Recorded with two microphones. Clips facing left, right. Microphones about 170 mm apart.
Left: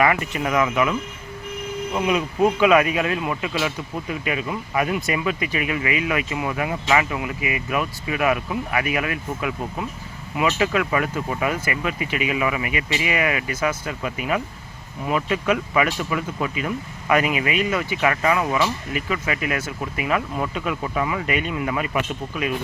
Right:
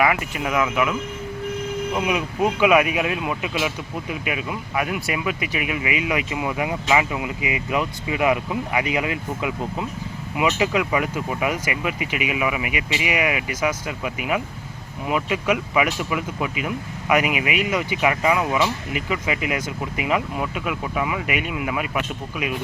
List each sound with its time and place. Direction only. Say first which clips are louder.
0.0 s speech: left 1 dB; 5° right (ahead or behind)
2.0 s speech: left 4 dB; 15° right (ahead or behind)